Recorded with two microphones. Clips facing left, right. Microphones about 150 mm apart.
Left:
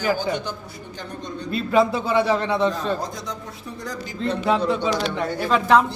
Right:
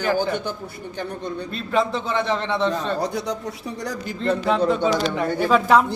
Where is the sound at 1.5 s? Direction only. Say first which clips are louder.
Left 4 dB; 5° left (ahead or behind).